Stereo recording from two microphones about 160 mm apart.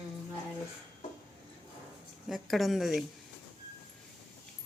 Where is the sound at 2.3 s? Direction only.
Centre (ahead or behind).